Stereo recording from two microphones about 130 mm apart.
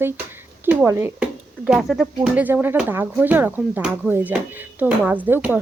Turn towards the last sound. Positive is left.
turn(degrees=-15)  # may be behind; listen again after turning